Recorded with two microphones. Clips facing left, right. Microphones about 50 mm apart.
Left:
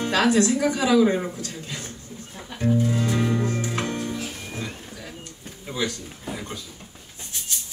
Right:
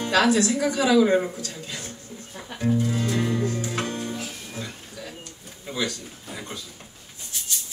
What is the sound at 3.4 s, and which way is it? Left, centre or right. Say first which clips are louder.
Music: left 1 dB; left.